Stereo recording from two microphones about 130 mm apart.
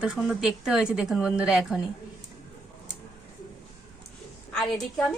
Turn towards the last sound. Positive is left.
turn(degrees=0)  # may be behind; listen again after turning